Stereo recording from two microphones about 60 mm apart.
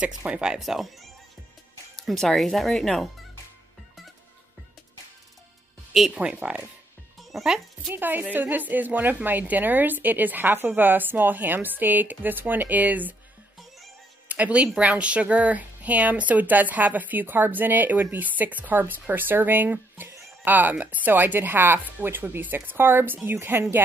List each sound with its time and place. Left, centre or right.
0.3 s speech: centre
0.6 s speech: centre
6.1 s a woman's voice: right
7.3 s speech: centre
7.9 s a woman's voice: right
14.3 s a woman's voice: right